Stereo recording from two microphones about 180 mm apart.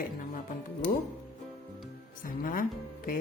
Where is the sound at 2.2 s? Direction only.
50° left (ahead or behind).